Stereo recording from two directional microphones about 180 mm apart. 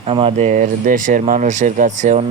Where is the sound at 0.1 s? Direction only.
30° right (ahead or behind).